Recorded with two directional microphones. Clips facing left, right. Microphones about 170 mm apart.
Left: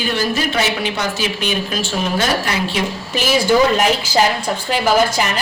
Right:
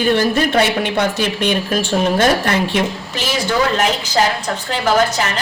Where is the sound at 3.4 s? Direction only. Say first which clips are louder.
Left 3 dB; 10° left (ahead or behind).